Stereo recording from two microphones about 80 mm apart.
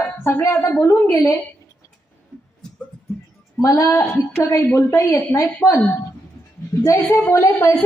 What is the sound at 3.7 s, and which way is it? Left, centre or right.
Speech, left.